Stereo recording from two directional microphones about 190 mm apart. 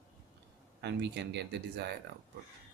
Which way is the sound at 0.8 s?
65° right (ahead or behind).